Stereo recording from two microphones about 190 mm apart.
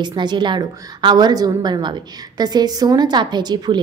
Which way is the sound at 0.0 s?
25° right (ahead or behind).